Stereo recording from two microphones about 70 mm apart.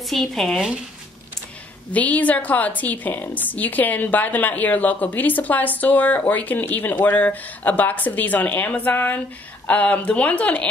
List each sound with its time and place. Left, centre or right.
0.0 s speech: centre
1.9 s a woman's voice: left